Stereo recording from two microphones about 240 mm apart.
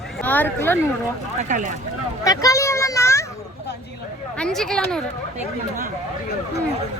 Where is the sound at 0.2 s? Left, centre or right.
Centre.